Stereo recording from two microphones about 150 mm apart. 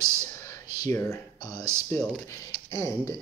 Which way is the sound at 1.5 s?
15° right (ahead or behind).